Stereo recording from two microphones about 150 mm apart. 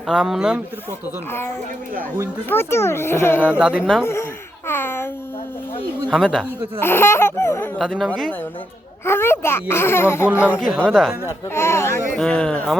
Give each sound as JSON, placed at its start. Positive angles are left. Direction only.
{"t": 0.1, "sound": "speech", "side_deg": -5}
{"t": 1.3, "sound": "a child's voice", "side_deg": 15}
{"t": 3.6, "sound": "speech", "side_deg": -5}
{"t": 4.0, "sound": "a child's voice", "side_deg": 15}
{"t": 6.1, "sound": "speech", "side_deg": -5}
{"t": 6.7, "sound": "a child's voice", "side_deg": 15}
{"t": 7.8, "sound": "speech", "side_deg": 0}
{"t": 9.0, "sound": "a child's voice", "side_deg": 15}
{"t": 10.6, "sound": "speech", "side_deg": -5}
{"t": 11.3, "sound": "a child's voice", "side_deg": 15}
{"t": 12.1, "sound": "a child's voice", "side_deg": 5}